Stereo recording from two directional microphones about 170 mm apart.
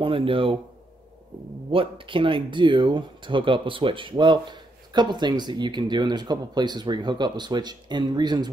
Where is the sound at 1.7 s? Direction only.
30° right (ahead or behind).